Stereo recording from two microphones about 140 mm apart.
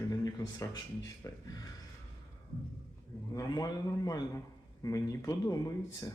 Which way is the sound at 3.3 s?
25° left (ahead or behind).